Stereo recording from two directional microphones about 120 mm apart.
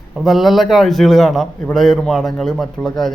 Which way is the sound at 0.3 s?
Centre (ahead or behind).